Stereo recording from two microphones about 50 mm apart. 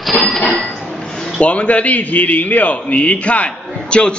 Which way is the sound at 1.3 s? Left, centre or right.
Left.